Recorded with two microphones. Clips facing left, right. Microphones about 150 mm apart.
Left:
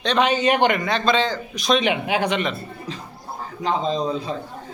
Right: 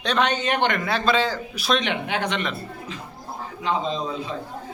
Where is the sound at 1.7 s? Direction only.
10° left (ahead or behind).